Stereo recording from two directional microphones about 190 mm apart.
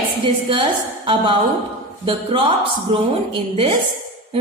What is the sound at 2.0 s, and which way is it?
A woman's voice, 30° right (ahead or behind).